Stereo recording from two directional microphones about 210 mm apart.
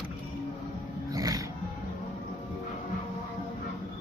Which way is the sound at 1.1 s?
15° right (ahead or behind).